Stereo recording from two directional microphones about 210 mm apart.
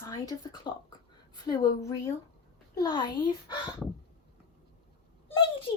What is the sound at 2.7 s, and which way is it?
Speech, 20° left (ahead or behind).